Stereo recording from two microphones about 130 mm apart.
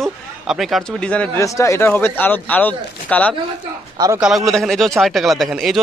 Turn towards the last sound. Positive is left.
turn(degrees=0)  # may be behind; listen again after turning